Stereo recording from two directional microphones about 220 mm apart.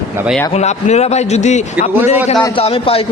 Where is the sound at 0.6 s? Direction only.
30° left (ahead or behind).